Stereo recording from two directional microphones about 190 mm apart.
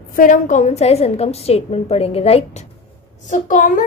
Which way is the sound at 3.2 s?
40° left (ahead or behind).